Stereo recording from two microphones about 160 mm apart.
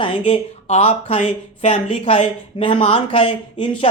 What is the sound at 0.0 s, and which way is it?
Speech, 40° left (ahead or behind).